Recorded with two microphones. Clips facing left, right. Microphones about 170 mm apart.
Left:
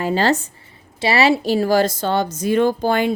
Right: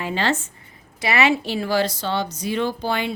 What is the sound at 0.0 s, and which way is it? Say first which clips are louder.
A woman's voice: left 5 dB; 40° left (ahead or behind).